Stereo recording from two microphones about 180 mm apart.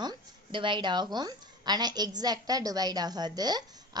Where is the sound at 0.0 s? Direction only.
25° right (ahead or behind).